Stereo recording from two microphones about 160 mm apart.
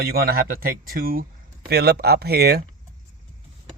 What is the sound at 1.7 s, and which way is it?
Speech, 80° right.